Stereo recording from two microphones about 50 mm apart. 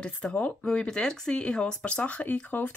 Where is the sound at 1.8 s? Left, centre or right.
Left.